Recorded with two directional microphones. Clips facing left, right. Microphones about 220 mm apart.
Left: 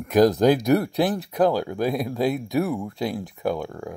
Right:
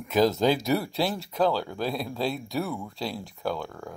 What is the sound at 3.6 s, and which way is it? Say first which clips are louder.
Speech: left 6 dB; 5° left (ahead or behind).